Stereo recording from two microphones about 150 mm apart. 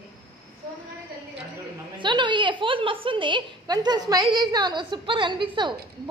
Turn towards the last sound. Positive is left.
turn(degrees=-30)  # may be behind; listen again after turning